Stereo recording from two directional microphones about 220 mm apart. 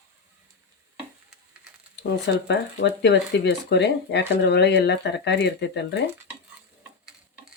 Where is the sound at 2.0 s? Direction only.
50° left (ahead or behind).